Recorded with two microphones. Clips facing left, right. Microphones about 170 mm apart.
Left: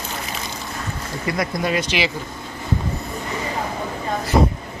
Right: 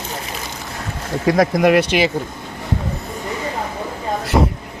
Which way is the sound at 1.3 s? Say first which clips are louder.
Right 9 dB; 85° right.